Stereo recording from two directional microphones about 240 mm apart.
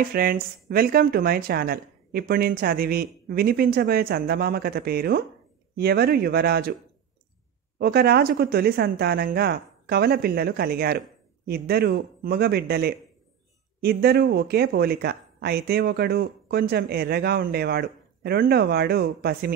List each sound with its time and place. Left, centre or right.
0.1 s speech: right
7.8 s speech: right